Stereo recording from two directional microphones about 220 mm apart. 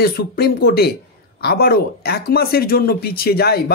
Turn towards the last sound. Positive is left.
turn(degrees=45)  # may be behind; listen again after turning